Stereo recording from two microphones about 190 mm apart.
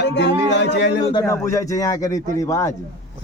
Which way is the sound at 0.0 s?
65° left (ahead or behind).